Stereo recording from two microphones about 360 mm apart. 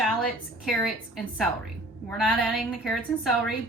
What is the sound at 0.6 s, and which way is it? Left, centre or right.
A woman's voice, centre.